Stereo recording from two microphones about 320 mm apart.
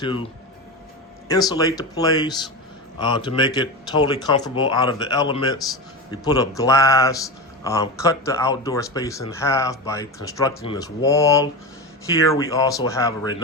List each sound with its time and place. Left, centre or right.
0.0 s speech: centre
1.3 s speech: centre